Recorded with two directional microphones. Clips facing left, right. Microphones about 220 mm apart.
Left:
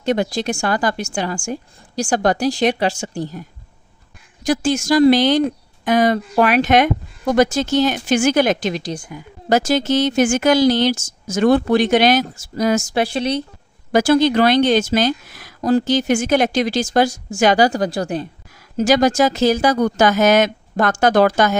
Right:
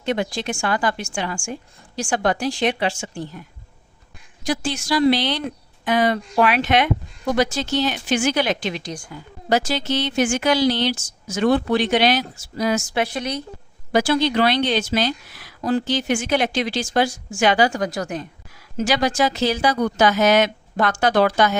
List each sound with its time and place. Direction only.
0.0 s a woman's voice: 40° left (ahead or behind)
4.4 s speech: 45° left (ahead or behind)
8.9 s a woman's voice: 20° left (ahead or behind)
9.5 s speech: 45° left (ahead or behind); by 13.4 s 30° left (ahead or behind)
13.9 s speech: 45° left (ahead or behind)
18.8 s speech: 45° left (ahead or behind)